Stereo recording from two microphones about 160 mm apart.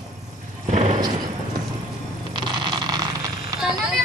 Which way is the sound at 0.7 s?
45° right (ahead or behind).